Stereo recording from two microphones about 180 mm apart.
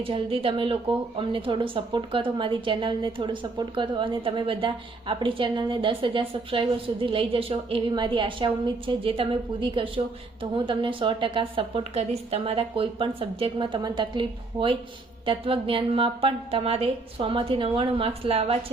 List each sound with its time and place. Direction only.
0.0 s a woman's voice: 30° right (ahead or behind)